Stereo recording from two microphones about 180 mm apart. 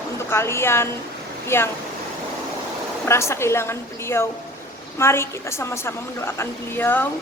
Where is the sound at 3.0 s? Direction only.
15° left (ahead or behind).